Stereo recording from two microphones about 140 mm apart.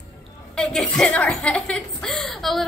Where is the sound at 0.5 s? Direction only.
5° left (ahead or behind).